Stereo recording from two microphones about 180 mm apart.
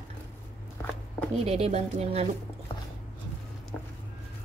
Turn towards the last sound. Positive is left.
turn(degrees=5)  # may be behind; listen again after turning